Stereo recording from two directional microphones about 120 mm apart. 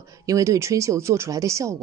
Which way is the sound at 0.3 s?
25° right (ahead or behind).